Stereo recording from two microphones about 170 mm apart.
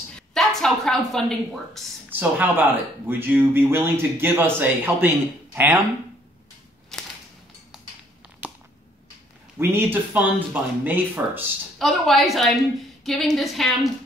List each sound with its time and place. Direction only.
0.3 s a woman's voice: 5° left (ahead or behind)
2.0 s speech: 10° right (ahead or behind)
6.9 s a sound: 5° left (ahead or behind)
9.6 s speech: 15° right (ahead or behind)
11.8 s a woman's voice: centre (ahead or behind)